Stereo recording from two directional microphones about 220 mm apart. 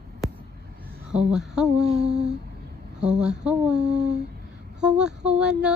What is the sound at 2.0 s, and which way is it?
Humming, 50° right (ahead or behind).